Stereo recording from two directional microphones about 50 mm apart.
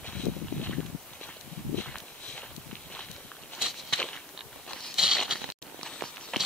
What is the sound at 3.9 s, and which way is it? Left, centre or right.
Walk, centre.